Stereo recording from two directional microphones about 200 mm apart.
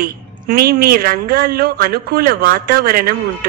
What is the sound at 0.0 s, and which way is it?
A woman's voice, 50° right (ahead or behind).